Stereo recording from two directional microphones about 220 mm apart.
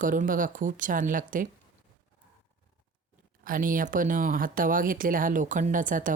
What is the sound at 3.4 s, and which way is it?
Speech, 40° right (ahead or behind).